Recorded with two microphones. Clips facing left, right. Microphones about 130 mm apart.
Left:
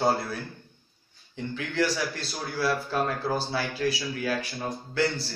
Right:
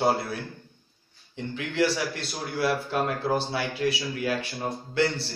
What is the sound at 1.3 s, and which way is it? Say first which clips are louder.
Speech: even; 25° right (ahead or behind).